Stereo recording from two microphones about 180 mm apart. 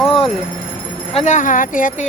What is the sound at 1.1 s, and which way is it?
Speech, 40° left (ahead or behind).